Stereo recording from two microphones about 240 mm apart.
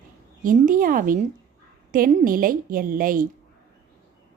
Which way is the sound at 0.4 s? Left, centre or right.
Right.